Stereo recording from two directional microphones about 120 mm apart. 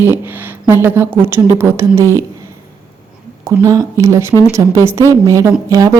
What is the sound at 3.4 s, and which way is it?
A woman's voice, 25° right (ahead or behind).